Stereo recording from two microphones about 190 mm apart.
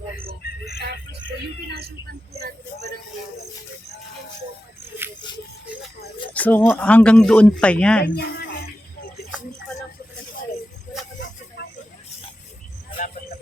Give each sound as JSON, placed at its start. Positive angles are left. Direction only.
{"t": 0.7, "sound": "vehicle", "side_deg": -65}
{"t": 2.3, "sound": "vehicle", "side_deg": -55}
{"t": 6.3, "sound": "speech", "side_deg": 10}
{"t": 8.0, "sound": "speech", "side_deg": 60}